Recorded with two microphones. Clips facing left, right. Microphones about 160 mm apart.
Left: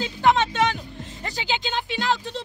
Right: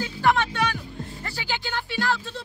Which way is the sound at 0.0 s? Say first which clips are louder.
Left 2 dB; 20° left (ahead or behind).